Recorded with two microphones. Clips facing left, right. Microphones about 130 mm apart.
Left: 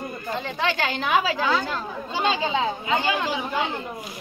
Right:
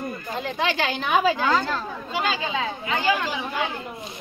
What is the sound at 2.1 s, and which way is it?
A child's voice, 25° left (ahead or behind).